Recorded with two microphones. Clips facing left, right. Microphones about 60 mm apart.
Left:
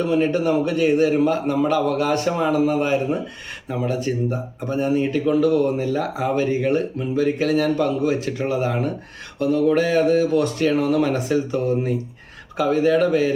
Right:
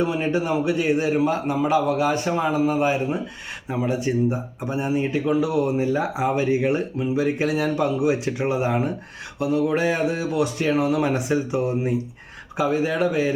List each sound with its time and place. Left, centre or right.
0.0 s speech: centre